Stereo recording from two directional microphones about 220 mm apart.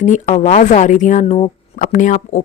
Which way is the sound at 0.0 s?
35° left (ahead or behind).